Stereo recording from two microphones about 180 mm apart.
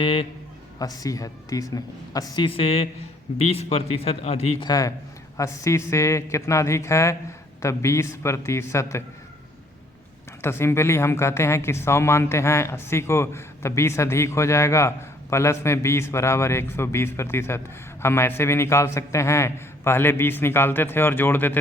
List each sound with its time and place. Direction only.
0.0 s a man's voice: 30° left (ahead or behind)
0.8 s a man's voice: 20° left (ahead or behind); by 4.7 s 35° left (ahead or behind)
4.7 s speech: 20° left (ahead or behind)
10.4 s speech: 15° left (ahead or behind)